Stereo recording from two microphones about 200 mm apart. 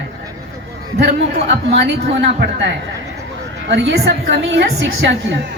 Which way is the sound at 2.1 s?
60° right (ahead or behind).